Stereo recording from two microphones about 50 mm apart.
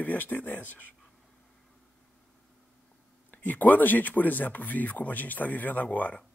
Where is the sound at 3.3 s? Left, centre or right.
Left.